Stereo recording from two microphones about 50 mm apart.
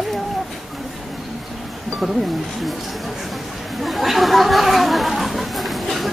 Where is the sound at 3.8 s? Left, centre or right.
Centre.